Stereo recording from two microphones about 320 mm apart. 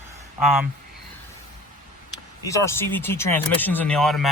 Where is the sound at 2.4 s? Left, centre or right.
Centre.